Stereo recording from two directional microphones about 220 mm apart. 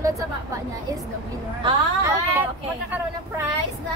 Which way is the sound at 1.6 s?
20° right (ahead or behind).